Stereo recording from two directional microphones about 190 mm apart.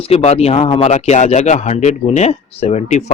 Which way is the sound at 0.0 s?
35° left (ahead or behind).